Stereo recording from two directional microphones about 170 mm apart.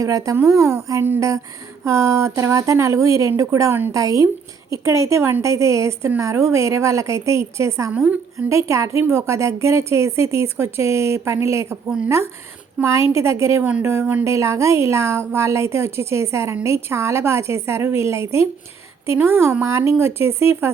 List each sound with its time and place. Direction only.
0.0 s a woman's voice: 20° right (ahead or behind)